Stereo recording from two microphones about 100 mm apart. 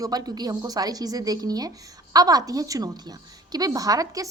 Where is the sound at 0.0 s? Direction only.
40° right (ahead or behind).